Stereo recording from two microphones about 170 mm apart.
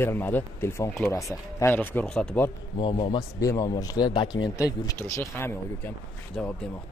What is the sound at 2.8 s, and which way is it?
Speech, 30° left (ahead or behind).